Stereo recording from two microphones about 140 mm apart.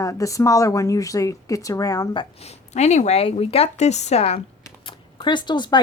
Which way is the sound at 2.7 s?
55° left (ahead or behind).